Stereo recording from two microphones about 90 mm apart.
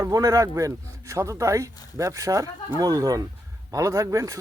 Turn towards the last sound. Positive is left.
turn(degrees=-35)  # may be behind; listen again after turning